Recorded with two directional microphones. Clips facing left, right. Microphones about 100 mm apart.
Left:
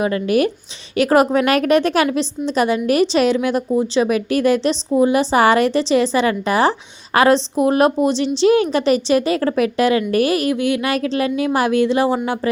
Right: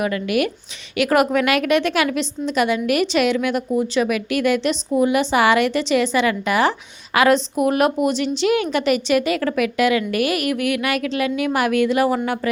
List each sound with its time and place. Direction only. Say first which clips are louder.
0.0 s a woman's voice: left 4 dB; 30° left (ahead or behind)